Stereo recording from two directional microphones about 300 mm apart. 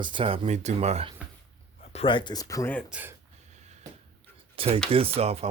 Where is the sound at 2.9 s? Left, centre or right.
Centre.